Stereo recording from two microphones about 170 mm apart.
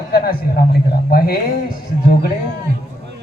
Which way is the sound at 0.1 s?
60° left (ahead or behind).